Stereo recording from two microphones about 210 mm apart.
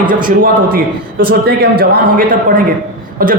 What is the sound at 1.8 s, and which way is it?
A man's voice, 45° right (ahead or behind).